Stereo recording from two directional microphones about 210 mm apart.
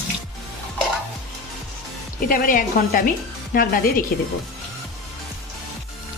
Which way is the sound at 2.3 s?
40° left (ahead or behind).